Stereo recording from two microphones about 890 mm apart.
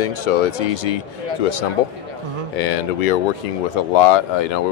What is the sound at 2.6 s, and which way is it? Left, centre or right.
Speech, left.